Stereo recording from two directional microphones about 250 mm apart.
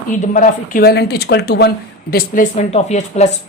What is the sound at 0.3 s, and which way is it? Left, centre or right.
Speech, left.